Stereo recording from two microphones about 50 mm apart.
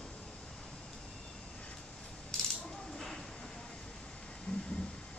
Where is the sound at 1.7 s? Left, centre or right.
Centre.